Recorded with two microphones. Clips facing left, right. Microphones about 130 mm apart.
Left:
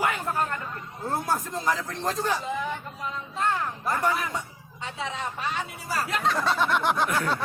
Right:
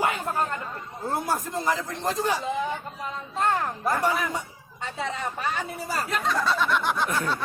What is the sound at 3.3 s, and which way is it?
Speech, 40° right (ahead or behind).